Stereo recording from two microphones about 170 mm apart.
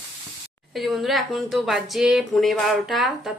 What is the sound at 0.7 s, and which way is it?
Speech, centre (ahead or behind).